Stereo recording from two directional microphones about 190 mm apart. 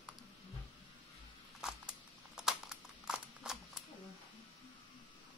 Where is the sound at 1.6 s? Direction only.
5° right (ahead or behind).